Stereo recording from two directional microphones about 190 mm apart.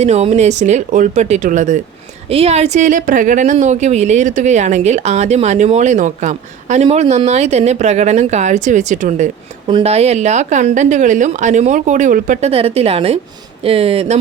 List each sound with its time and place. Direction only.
0.0 s a woman's voice: 35° right (ahead or behind)
9.6 s a woman's voice: 30° right (ahead or behind)